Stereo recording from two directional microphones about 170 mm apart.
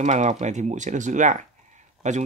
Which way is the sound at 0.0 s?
45° right (ahead or behind).